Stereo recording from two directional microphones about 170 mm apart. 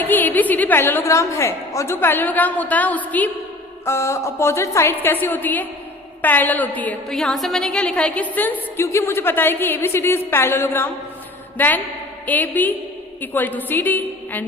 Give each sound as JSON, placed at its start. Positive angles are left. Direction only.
{"t": 0.0, "sound": "a woman's voice", "side_deg": 10}